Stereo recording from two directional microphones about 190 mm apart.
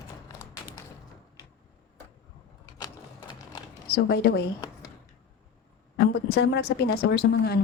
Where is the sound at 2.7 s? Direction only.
25° left (ahead or behind).